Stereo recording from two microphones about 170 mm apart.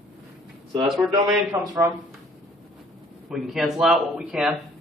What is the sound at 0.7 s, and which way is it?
Speech, centre (ahead or behind).